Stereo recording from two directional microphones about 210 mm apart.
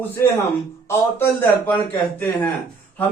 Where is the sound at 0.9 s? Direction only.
10° left (ahead or behind).